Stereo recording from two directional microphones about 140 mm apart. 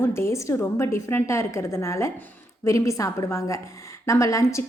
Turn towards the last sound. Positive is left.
turn(degrees=20)  # may be behind; listen again after turning